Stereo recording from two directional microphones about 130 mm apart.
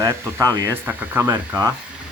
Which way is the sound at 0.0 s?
25° right (ahead or behind).